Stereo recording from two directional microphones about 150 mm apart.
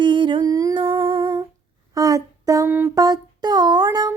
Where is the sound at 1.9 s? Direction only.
25° right (ahead or behind).